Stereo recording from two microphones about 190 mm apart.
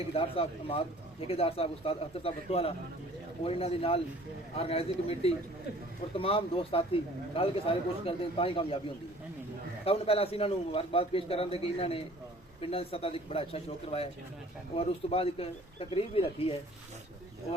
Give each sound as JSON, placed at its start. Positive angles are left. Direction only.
{"t": 0.1, "sound": "a man's voice", "side_deg": 30}
{"t": 9.8, "sound": "a man's voice", "side_deg": 30}